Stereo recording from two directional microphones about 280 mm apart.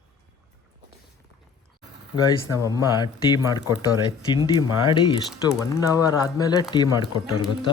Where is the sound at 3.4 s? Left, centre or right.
Centre.